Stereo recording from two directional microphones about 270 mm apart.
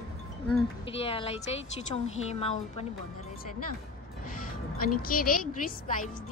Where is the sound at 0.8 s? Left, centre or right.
Left.